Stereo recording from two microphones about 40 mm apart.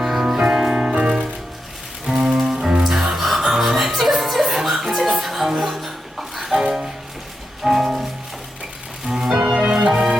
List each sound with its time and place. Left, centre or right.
0.1 s music: centre
2.6 s music: right
2.8 s music: centre
3.1 s music: centre
9.0 s music: centre